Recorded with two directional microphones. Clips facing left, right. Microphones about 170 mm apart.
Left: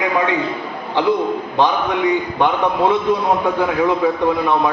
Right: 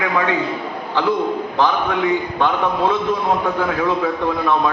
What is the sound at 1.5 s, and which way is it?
A man's voice, 20° left (ahead or behind).